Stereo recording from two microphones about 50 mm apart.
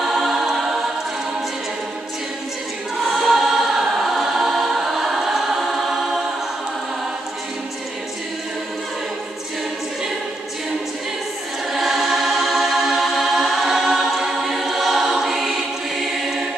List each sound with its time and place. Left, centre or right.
0.0 s choir: centre
3.0 s choir: centre
11.7 s choir: centre